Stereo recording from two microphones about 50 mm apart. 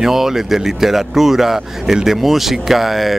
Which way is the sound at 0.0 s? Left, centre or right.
Centre.